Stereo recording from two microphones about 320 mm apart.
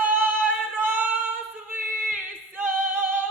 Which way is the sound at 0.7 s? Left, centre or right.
Centre.